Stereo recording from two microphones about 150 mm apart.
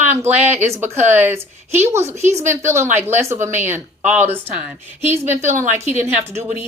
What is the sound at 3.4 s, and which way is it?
Speech, 50° right (ahead or behind).